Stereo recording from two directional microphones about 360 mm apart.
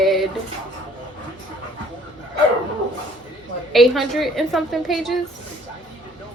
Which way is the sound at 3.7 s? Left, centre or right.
Centre.